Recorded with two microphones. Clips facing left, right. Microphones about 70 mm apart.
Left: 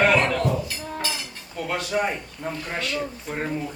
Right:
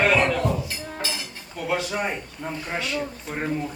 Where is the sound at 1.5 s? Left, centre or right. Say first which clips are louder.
Even; centre.